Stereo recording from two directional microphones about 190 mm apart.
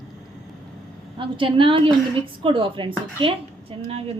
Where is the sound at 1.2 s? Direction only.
25° right (ahead or behind).